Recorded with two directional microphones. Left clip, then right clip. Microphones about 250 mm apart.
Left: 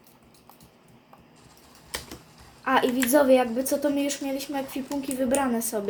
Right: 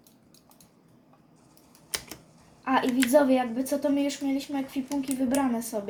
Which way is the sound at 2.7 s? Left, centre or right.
Centre.